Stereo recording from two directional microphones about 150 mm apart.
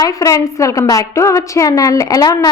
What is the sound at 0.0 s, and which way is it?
A woman's voice, 20° left (ahead or behind).